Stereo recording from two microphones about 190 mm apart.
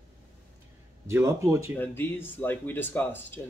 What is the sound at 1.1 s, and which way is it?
Speech, 15° right (ahead or behind).